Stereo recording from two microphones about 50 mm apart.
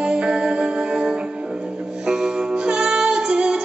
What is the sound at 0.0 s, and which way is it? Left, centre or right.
Music, centre.